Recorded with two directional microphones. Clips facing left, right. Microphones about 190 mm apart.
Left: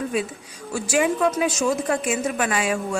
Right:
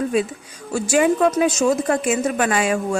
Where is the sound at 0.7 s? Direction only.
45° right (ahead or behind).